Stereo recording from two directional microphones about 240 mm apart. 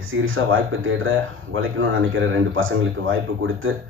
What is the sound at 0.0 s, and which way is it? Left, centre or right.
A man's voice, right.